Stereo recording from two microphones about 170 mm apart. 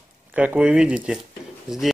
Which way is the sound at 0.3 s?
10° right (ahead or behind).